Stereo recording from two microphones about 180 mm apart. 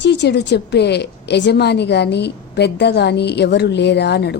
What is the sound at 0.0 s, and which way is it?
A woman's voice, 75° left (ahead or behind).